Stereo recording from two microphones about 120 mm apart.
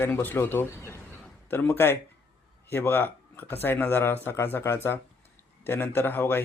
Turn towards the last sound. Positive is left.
turn(degrees=20)  # may be behind; listen again after turning